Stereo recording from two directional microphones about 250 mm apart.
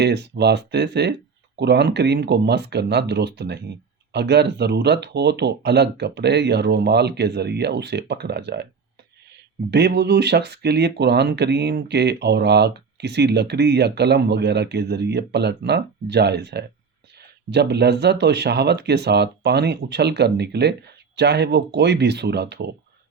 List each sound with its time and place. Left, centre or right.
0.0 s speech: right
9.6 s speech: right